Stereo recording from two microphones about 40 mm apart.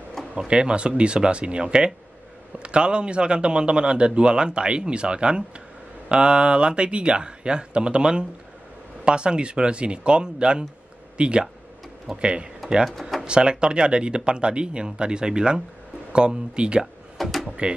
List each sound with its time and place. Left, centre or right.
0.2 s a sound: centre
0.5 s a man's voice: right
17.2 s speech: centre
17.6 s a man's voice: right